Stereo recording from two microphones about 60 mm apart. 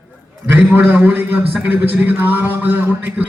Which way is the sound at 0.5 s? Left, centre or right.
Right.